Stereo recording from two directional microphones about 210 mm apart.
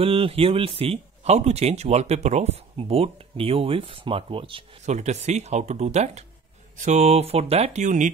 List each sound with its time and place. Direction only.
0.0 s speech: 25° right (ahead or behind)